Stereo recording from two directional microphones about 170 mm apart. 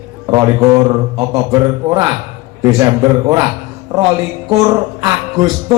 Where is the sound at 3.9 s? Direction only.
20° right (ahead or behind).